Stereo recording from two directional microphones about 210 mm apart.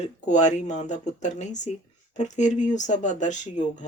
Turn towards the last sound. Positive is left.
turn(degrees=35)  # may be behind; listen again after turning